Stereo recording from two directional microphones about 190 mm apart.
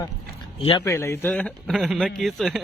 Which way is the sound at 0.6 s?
30° left (ahead or behind).